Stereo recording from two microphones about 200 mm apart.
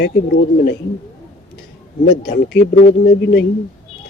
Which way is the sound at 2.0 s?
50° left (ahead or behind).